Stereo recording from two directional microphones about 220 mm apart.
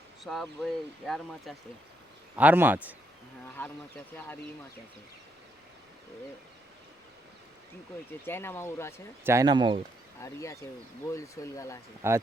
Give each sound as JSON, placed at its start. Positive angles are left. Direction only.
{"t": 0.3, "sound": "speech", "side_deg": 0}
{"t": 3.6, "sound": "speech", "side_deg": 10}
{"t": 8.2, "sound": "speech", "side_deg": 10}
{"t": 9.2, "sound": "speech", "side_deg": -15}
{"t": 10.2, "sound": "speech", "side_deg": 15}
{"t": 12.0, "sound": "speech", "side_deg": -10}